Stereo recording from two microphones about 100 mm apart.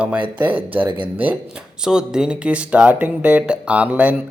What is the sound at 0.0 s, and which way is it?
Speech, 15° right (ahead or behind).